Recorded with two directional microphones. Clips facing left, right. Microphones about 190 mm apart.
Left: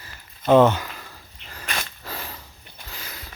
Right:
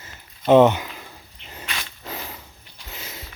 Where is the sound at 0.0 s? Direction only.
20° right (ahead or behind).